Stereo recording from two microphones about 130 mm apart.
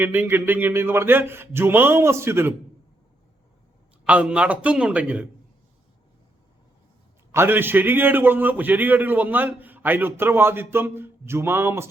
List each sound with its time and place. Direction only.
0.0 s a man's voice: 15° right (ahead or behind)
4.0 s a man's voice: 10° right (ahead or behind)
7.3 s a man's voice: 20° right (ahead or behind)